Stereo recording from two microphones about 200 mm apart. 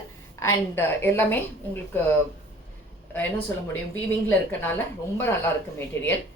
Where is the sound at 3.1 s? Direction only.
10° left (ahead or behind).